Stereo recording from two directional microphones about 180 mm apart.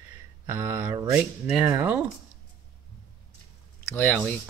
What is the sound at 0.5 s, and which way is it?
Speech, 15° right (ahead or behind).